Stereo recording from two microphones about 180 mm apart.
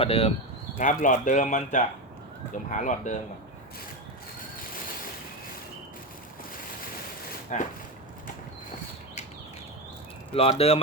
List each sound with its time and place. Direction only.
0.0 s speech: 35° left (ahead or behind)
0.8 s speech: 45° left (ahead or behind)
7.5 s speech: 40° left (ahead or behind)
10.3 s speech: 30° left (ahead or behind)